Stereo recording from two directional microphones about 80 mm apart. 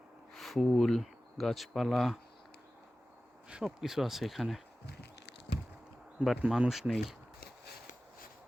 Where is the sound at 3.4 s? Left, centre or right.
Centre.